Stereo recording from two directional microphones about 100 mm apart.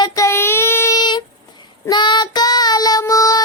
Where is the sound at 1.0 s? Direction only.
45° left (ahead or behind).